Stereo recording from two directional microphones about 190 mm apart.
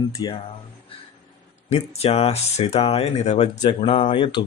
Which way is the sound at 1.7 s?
35° left (ahead or behind).